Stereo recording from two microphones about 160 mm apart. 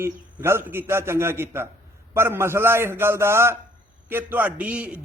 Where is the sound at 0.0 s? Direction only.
15° right (ahead or behind).